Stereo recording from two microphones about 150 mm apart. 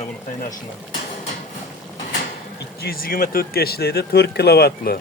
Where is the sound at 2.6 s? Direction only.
85° left.